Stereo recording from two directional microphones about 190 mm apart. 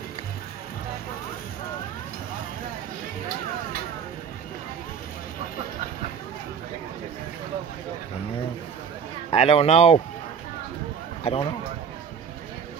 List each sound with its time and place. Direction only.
9.3 s speech: 30° left (ahead or behind)
11.2 s speech: 30° left (ahead or behind)